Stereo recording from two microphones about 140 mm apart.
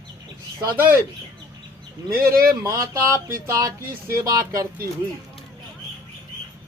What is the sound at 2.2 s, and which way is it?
Speech, 90° right.